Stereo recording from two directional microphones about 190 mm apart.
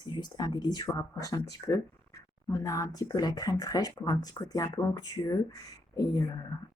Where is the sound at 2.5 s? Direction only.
15° left (ahead or behind).